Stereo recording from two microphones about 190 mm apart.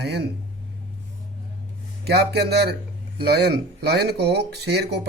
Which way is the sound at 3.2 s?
60° right (ahead or behind).